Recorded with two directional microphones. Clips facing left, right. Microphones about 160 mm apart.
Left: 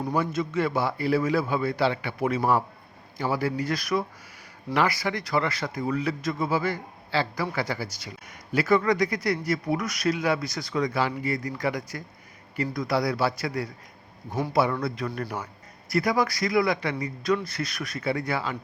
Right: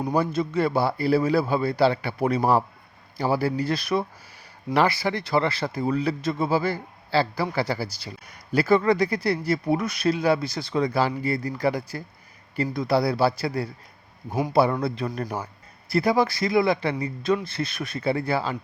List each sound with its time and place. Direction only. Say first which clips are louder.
0.1 s speech: right 3 dB; 35° right (ahead or behind)